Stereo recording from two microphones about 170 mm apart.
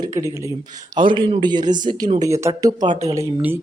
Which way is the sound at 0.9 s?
30° right (ahead or behind).